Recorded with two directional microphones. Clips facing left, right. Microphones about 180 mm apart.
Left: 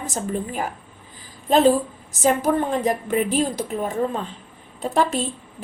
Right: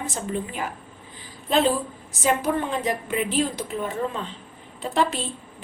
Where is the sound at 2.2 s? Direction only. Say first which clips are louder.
Left 4 dB; 40° left (ahead or behind).